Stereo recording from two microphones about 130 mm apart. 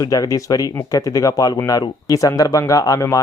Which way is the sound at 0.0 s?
25° left (ahead or behind).